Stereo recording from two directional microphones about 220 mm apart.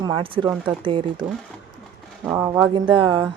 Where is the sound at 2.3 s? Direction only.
10° right (ahead or behind).